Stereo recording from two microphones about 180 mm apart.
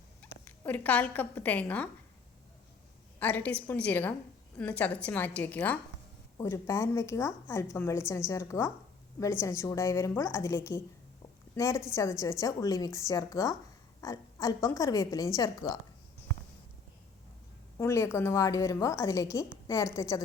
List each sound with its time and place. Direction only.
0.2 s speech: 10° left (ahead or behind)
3.2 s a woman's voice: 10° left (ahead or behind)
17.7 s a woman's voice: 15° left (ahead or behind)